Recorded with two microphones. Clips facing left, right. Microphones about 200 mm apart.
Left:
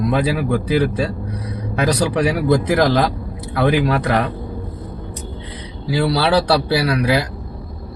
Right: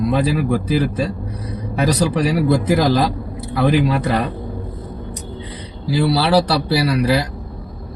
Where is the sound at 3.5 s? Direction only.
Centre (ahead or behind).